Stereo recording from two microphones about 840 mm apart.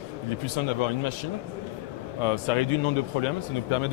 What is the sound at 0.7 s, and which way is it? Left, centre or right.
Speech, left.